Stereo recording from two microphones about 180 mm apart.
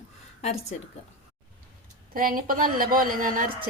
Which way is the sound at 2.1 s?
50° right (ahead or behind).